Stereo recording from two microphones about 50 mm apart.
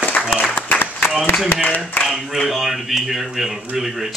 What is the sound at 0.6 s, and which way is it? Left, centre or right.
Applause, left.